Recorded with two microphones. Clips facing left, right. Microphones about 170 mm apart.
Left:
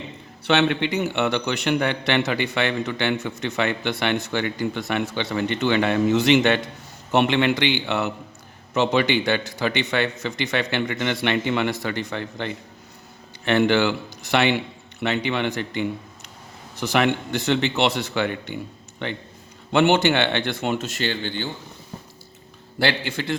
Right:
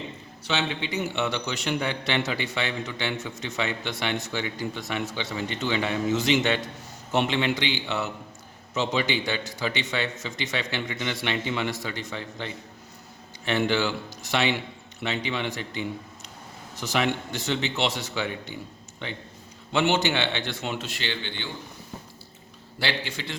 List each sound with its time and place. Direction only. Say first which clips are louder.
0.4 s a man's voice: left 9 dB; 65° left (ahead or behind); by 21.5 s 45° left (ahead or behind)
22.8 s a man's voice: left 7 dB; 55° left (ahead or behind)